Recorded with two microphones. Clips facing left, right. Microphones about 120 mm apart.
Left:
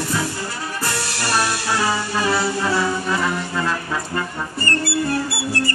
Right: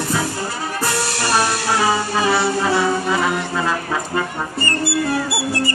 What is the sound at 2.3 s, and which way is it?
Music, 35° right (ahead or behind).